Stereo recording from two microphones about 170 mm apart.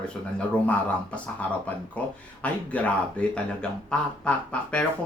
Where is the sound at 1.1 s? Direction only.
10° left (ahead or behind).